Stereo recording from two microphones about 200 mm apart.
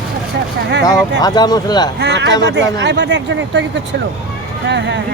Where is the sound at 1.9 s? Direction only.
55° right (ahead or behind).